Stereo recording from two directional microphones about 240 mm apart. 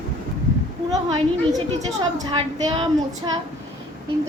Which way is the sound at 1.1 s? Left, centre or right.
Centre.